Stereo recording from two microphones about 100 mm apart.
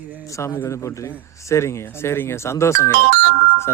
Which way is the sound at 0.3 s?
30° left (ahead or behind).